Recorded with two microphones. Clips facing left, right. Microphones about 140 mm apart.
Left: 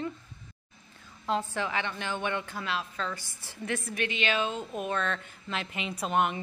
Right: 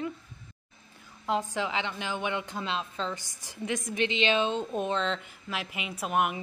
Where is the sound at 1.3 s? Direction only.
15° right (ahead or behind).